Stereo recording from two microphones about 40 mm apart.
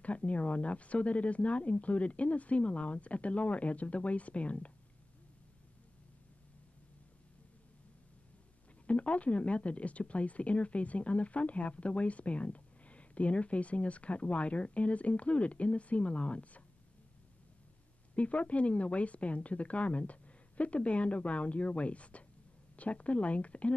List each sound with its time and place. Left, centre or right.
0.0 s speech: left
8.8 s speech: left
18.1 s speech: left